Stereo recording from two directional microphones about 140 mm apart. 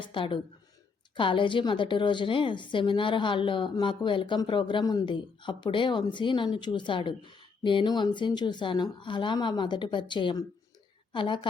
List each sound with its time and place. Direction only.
0.0 s a woman's voice: 40° left (ahead or behind)